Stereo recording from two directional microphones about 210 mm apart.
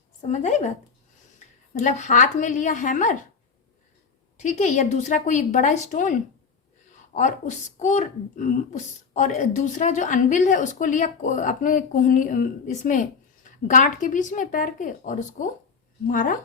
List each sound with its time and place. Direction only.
0.2 s a woman's voice: 35° left (ahead or behind)
4.4 s speech: 35° left (ahead or behind)
7.2 s speech: 35° left (ahead or behind)